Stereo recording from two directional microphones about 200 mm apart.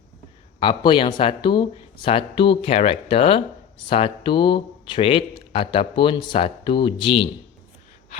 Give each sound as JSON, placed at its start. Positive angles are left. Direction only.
{"t": 0.6, "sound": "speech", "side_deg": 25}